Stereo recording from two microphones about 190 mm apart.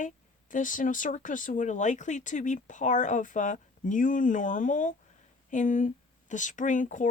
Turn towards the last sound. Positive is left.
turn(degrees=40)  # may be behind; listen again after turning